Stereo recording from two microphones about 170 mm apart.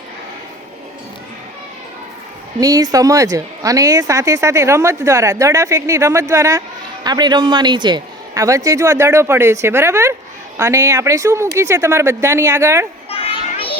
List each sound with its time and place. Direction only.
2.6 s a woman's voice: 20° right (ahead or behind)
13.1 s children playing: 35° left (ahead or behind)